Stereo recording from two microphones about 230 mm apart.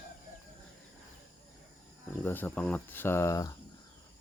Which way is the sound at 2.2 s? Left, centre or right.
Centre.